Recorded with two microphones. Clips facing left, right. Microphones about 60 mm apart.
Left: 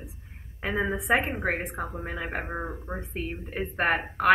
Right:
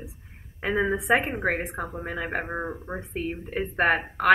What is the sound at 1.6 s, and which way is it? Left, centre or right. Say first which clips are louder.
Speech: right 1 dB; centre.